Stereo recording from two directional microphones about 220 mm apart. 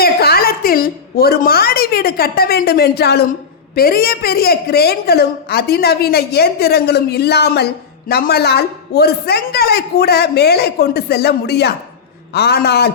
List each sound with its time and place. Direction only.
0.0 s a woman's voice: 45° left (ahead or behind)